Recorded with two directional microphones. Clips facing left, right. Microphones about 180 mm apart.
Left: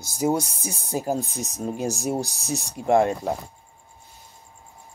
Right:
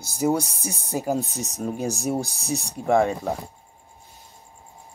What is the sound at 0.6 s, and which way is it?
Speech, 60° left (ahead or behind).